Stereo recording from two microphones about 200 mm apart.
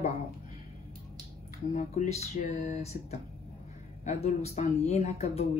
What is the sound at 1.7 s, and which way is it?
Speech, 40° left (ahead or behind).